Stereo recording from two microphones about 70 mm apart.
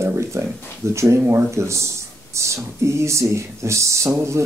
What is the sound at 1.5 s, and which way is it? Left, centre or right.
Speech, right.